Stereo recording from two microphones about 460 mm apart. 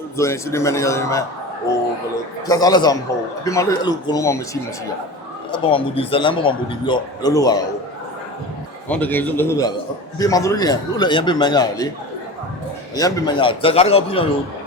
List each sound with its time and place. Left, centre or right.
0.2 s a man's voice: centre
2.5 s a man's voice: centre
5.5 s a man's voice: centre
8.9 s a man's voice: centre
13.0 s a man's voice: centre